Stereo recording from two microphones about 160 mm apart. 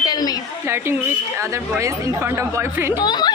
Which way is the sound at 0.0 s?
25° left (ahead or behind).